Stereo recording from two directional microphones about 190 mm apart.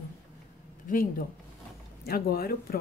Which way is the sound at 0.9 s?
50° left (ahead or behind).